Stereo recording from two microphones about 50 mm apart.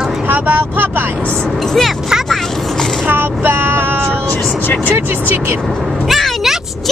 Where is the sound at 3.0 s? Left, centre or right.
Right.